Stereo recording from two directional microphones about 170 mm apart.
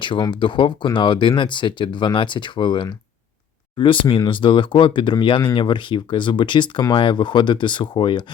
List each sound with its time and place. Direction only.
0.0 s speech: 30° left (ahead or behind)